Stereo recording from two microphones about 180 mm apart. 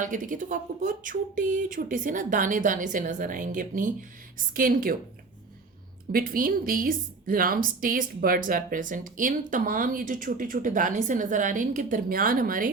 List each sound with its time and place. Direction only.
0.0 s a woman's voice: 45° right (ahead or behind)
6.1 s a woman's voice: 55° right (ahead or behind)